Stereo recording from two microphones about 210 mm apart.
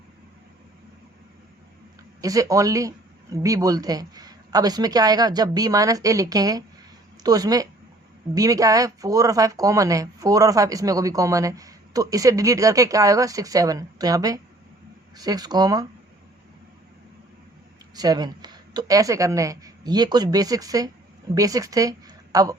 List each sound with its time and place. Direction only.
2.2 s speech: 15° right (ahead or behind)
17.9 s a woman's voice: 20° right (ahead or behind)